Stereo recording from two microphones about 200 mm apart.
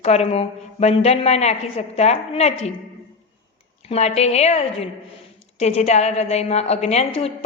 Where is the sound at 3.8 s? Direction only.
30° left (ahead or behind).